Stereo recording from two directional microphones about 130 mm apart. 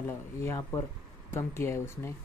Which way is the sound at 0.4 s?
20° left (ahead or behind).